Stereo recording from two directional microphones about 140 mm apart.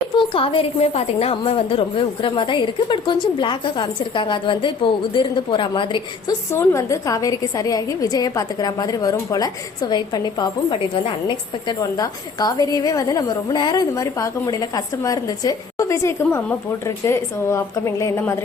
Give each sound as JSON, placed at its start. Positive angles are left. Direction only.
{"t": 0.2, "sound": "a woman's voice", "side_deg": 40}
{"t": 6.5, "sound": "a woman's voice", "side_deg": 20}
{"t": 11.8, "sound": "a woman's voice", "side_deg": 25}